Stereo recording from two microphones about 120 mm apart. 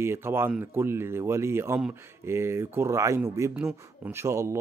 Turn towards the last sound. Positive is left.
turn(degrees=-25)  # may be behind; listen again after turning